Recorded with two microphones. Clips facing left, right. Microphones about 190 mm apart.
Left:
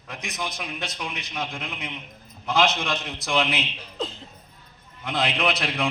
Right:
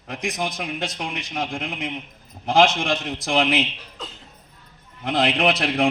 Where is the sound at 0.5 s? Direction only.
50° right (ahead or behind).